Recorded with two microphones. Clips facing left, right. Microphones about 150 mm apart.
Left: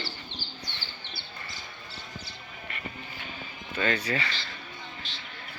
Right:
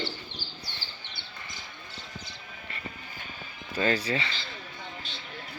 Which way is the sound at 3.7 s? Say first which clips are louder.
Right 1 dB; 30° right (ahead or behind).